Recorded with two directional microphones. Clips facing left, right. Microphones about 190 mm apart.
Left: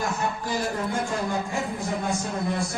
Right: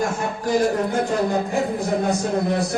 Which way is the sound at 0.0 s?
45° right (ahead or behind).